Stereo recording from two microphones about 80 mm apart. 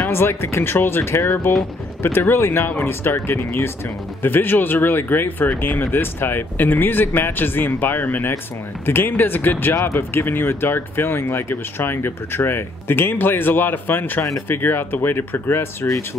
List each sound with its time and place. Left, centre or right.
0.0 s speech: left